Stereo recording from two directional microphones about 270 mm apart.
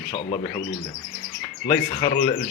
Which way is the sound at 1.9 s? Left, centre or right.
Left.